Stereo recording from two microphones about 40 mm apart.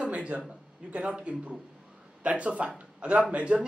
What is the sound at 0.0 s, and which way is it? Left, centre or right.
A man's voice, right.